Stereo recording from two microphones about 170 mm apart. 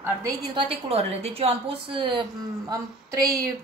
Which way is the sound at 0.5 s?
30° right (ahead or behind).